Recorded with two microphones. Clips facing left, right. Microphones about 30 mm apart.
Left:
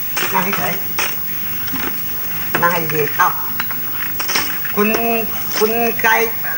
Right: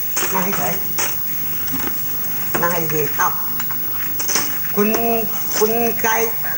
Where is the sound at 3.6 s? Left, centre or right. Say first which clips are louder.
Left 5 dB; left.